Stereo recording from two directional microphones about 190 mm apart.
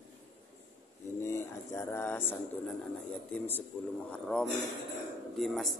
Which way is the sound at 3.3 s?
10° left (ahead or behind).